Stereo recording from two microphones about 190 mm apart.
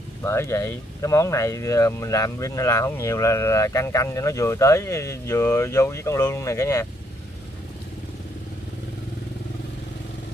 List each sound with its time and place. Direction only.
0.2 s speech: 15° left (ahead or behind)